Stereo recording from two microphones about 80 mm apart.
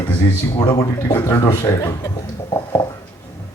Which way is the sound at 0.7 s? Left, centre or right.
Left.